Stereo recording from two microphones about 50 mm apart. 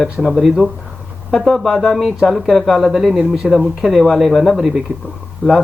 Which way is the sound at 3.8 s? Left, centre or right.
Centre.